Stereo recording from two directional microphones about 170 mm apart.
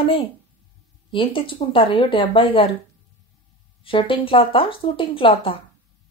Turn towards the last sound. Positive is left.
turn(degrees=30)  # may be behind; listen again after turning